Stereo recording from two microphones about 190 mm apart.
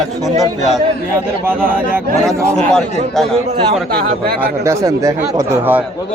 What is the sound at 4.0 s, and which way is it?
Speech, 55° right (ahead or behind).